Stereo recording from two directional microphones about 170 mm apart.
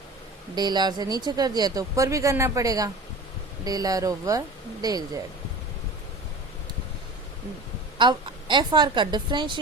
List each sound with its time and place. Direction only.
0.5 s speech: 25° right (ahead or behind)
7.9 s speech: 30° right (ahead or behind)